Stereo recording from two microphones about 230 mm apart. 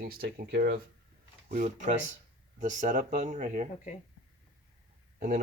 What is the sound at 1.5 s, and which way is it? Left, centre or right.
Speech, right.